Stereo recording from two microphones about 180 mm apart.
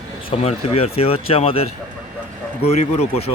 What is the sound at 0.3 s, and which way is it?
Speech, 35° left (ahead or behind).